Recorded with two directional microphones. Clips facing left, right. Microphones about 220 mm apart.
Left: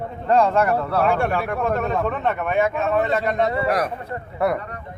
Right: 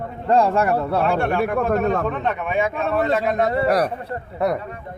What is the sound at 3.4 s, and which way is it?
Speech, 40° right (ahead or behind).